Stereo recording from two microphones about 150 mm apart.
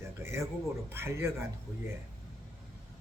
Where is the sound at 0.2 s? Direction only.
20° right (ahead or behind).